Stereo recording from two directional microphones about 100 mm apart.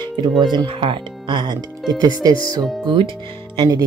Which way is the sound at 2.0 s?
40° right (ahead or behind).